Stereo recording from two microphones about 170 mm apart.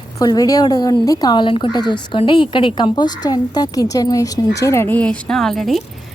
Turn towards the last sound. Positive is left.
turn(degrees=0)  # may be behind; listen again after turning